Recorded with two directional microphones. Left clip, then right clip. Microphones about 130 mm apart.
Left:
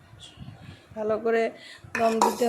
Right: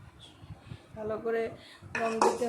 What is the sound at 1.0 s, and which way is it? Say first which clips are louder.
A woman's voice: left 8 dB; 50° left (ahead or behind).